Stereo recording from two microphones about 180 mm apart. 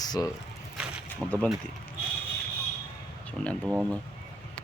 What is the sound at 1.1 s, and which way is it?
Speech, 10° left (ahead or behind).